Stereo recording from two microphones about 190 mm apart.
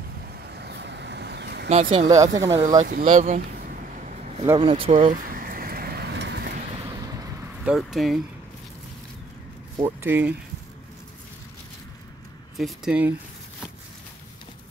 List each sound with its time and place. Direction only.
0.6 s vehicle: 65° right (ahead or behind)
1.7 s speech: 30° right (ahead or behind)
2.0 s speech: 20° right (ahead or behind)
2.8 s speech: 45° right (ahead or behind)
4.6 s speech: 30° right (ahead or behind)
5.3 s vehicle: 50° right (ahead or behind)
6.7 s vehicle: 20° right (ahead or behind)
7.6 s speech: centre (ahead or behind)
9.8 s speech: 10° right (ahead or behind)
12.5 s speech: centre (ahead or behind)